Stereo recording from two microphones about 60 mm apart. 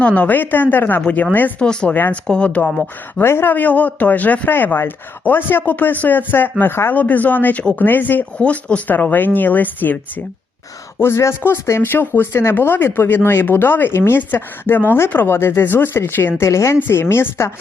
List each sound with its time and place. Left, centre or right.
0.0 s speech: left
1.5 s speech: centre
3.2 s speech: left
3.5 s speech: left
8.4 s speech: left
11.0 s a woman's voice: left
11.8 s speech: left
16.8 s a woman's voice: left